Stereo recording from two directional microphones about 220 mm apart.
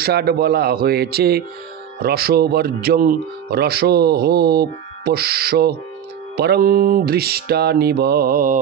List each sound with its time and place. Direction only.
0.0 s speech: 45° right (ahead or behind)